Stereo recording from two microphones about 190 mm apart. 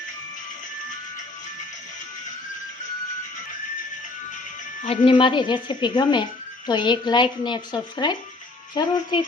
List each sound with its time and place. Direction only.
4.9 s a woman's voice: 25° left (ahead or behind)